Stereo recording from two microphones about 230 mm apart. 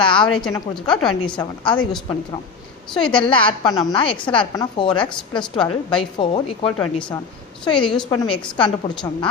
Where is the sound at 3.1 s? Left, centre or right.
Left.